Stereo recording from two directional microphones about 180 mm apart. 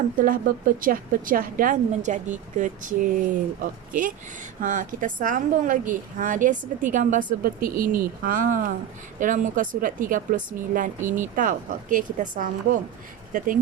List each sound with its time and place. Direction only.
0.2 s a woman's voice: 50° right (ahead or behind)